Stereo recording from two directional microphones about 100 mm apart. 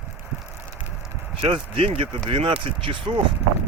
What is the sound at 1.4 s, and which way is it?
Speech, 65° right (ahead or behind).